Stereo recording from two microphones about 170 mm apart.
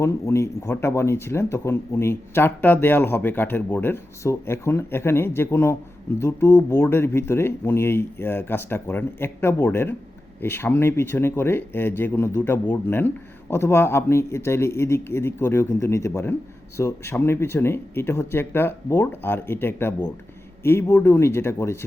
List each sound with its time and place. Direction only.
0.0 s speech: 15° left (ahead or behind)